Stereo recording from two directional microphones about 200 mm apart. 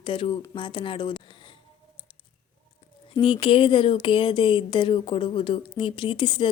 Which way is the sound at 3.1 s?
25° left (ahead or behind).